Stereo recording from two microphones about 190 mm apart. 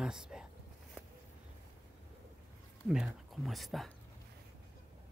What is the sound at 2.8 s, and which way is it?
Speech, 5° right (ahead or behind).